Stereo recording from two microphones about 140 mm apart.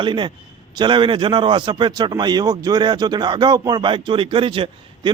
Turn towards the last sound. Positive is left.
turn(degrees=-40)  # may be behind; listen again after turning